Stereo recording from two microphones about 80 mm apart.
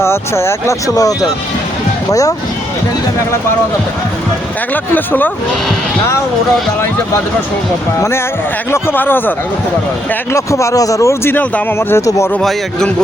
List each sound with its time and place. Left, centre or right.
0.0 s speech: left
4.7 s speech: left
7.9 s speech: left
10.3 s speech: left
12.4 s a man's voice: centre